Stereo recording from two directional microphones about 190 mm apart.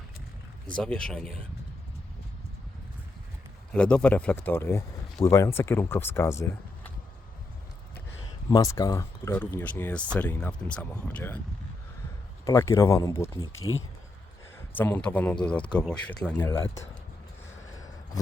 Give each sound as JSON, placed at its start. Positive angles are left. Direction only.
{"t": 0.8, "sound": "speech", "side_deg": 5}
{"t": 3.7, "sound": "speech", "side_deg": 5}
{"t": 8.4, "sound": "speech", "side_deg": 15}
{"t": 12.5, "sound": "speech", "side_deg": 15}
{"t": 14.7, "sound": "speech", "side_deg": 10}
{"t": 17.7, "sound": "a sound", "side_deg": 20}